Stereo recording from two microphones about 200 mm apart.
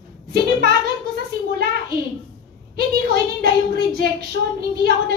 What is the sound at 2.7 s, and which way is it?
A woman's voice, 50° right (ahead or behind).